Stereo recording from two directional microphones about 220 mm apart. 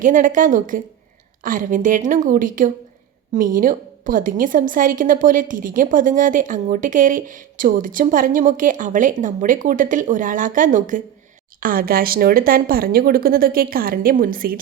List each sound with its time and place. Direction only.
0.0 s a woman's voice: 35° right (ahead or behind)